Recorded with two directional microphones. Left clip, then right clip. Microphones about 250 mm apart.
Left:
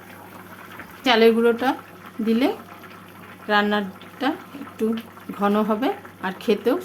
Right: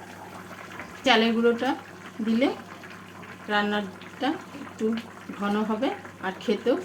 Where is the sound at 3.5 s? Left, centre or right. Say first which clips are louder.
Left 5 dB; left.